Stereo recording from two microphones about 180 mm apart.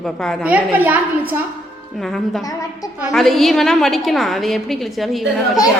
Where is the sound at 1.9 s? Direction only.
Centre (ahead or behind).